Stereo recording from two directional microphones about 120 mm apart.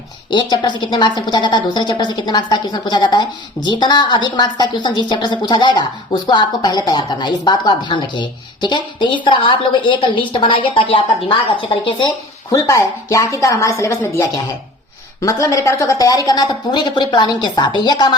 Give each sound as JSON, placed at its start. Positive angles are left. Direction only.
{"t": 0.3, "sound": "a woman's voice", "side_deg": 35}
{"t": 12.5, "sound": "a woman's voice", "side_deg": 25}